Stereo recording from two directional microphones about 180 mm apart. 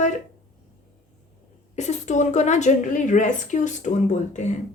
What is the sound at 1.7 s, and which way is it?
A woman's voice, 40° left (ahead or behind).